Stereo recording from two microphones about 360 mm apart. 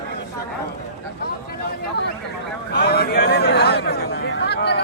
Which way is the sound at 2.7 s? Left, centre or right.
Left.